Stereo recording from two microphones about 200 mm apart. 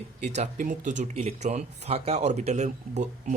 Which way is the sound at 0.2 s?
35° right (ahead or behind).